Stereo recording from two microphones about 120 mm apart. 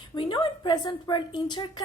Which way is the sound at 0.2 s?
50° left (ahead or behind).